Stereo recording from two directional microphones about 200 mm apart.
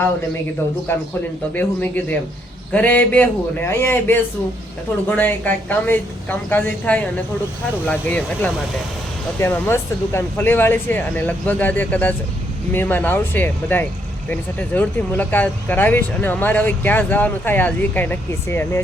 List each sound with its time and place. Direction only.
1.5 s speech: 10° left (ahead or behind)